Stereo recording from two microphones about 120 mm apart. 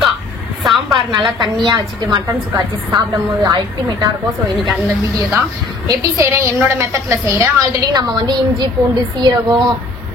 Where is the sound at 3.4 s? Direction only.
35° right (ahead or behind).